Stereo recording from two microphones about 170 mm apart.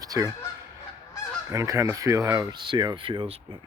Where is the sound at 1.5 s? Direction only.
20° right (ahead or behind).